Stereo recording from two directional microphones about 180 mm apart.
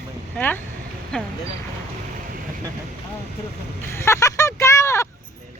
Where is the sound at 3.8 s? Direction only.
15° left (ahead or behind).